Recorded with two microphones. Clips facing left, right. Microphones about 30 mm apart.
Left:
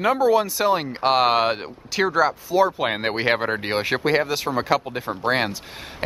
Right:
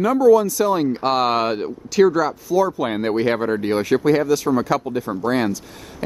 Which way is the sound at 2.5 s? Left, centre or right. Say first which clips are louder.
Right 4 dB; left.